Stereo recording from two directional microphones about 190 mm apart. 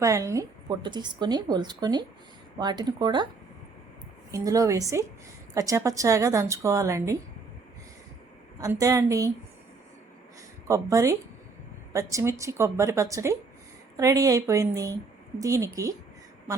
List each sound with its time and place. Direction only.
0.0 s speech: 15° right (ahead or behind)
4.3 s a woman's voice: 15° right (ahead or behind)
8.5 s a woman's voice: 15° right (ahead or behind)
10.7 s a woman's voice: 15° right (ahead or behind)